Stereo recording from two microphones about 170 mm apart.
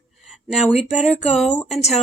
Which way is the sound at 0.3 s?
Centre (ahead or behind).